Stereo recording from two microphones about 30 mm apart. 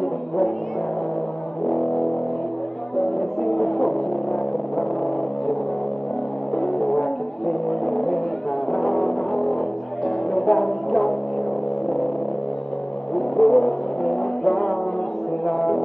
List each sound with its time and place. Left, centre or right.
1.7 s music: centre
6.5 s music: centre
13.4 s music: centre